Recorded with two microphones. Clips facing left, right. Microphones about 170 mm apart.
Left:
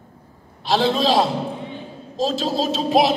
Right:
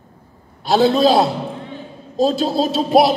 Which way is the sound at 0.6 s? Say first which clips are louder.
Right 5 dB; 45° right (ahead or behind).